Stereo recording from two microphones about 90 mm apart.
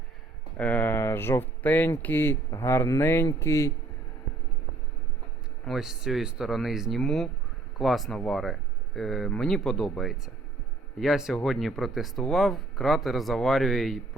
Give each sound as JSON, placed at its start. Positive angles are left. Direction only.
{"t": 0.5, "sound": "speech", "side_deg": 15}
{"t": 5.6, "sound": "speech", "side_deg": -5}